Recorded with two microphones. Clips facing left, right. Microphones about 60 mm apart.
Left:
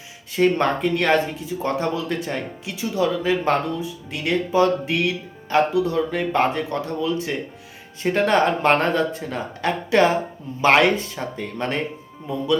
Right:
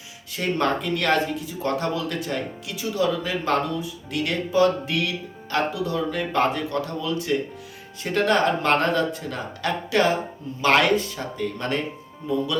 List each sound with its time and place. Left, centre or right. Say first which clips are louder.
0.3 s speech: left 5 dB; left